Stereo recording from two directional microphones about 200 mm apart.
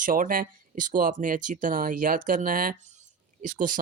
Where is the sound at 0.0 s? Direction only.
45° right (ahead or behind).